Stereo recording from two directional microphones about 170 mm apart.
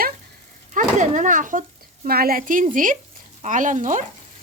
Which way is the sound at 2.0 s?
60° right (ahead or behind).